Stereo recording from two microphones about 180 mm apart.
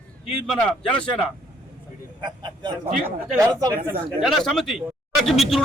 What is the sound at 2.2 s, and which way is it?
Speech, 25° right (ahead or behind).